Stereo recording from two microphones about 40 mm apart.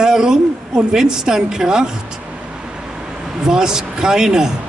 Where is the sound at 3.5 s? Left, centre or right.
Centre.